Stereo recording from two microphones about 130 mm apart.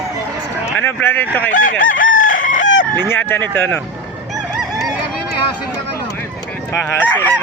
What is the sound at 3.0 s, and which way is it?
Speech, 15° left (ahead or behind).